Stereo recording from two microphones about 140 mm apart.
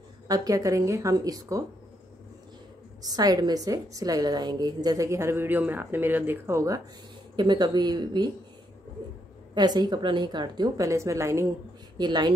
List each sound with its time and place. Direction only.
0.3 s a woman's voice: 25° right (ahead or behind)
3.0 s a woman's voice: 25° right (ahead or behind)
9.5 s a woman's voice: 30° right (ahead or behind)
12.0 s speech: 30° right (ahead or behind)